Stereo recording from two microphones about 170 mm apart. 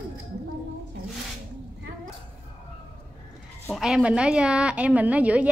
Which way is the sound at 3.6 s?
Centre (ahead or behind).